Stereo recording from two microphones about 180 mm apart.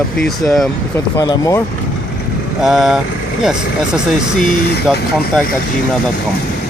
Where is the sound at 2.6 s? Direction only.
Centre (ahead or behind).